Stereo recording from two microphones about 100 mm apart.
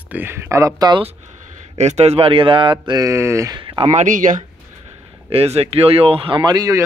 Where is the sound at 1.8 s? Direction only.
90° right; by 3.0 s 50° right (ahead or behind).